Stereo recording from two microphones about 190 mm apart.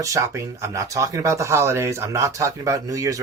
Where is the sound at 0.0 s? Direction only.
15° right (ahead or behind).